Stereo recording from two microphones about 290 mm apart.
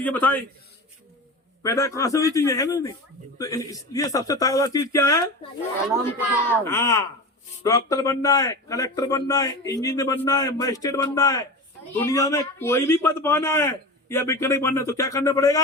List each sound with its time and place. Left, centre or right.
0.0 s a man's voice: centre
1.6 s speech: centre
6.7 s speech: centre